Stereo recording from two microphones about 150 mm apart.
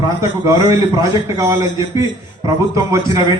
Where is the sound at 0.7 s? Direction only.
20° right (ahead or behind).